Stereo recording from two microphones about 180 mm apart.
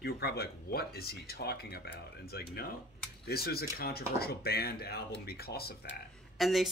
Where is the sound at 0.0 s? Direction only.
60° left (ahead or behind).